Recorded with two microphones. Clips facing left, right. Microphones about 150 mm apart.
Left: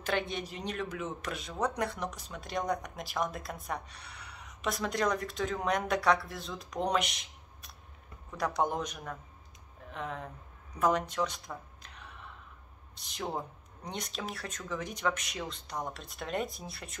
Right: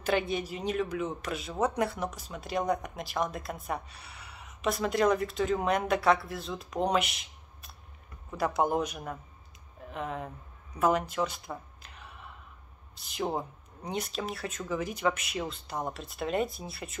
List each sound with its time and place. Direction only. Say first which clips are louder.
0.0 s a man's voice: right 4 dB; 5° right (ahead or behind)